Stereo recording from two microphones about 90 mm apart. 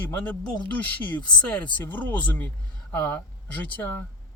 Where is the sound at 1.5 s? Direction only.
20° left (ahead or behind).